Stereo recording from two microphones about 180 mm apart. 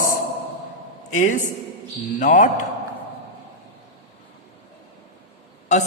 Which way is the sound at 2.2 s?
45° left (ahead or behind).